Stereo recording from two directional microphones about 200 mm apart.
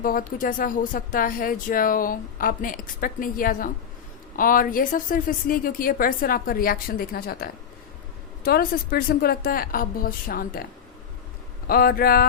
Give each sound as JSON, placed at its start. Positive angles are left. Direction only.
{"t": 0.0, "sound": "speech", "side_deg": 45}
{"t": 11.7, "sound": "speech", "side_deg": 50}